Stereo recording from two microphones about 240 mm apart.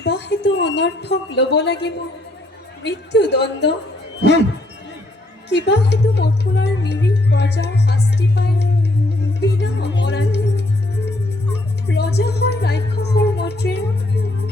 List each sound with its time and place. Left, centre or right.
0.0 s a woman's voice: left
5.5 s speech: left
9.4 s music: left